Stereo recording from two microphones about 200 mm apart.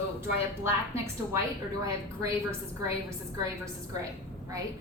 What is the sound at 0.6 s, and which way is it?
Speech, 15° right (ahead or behind).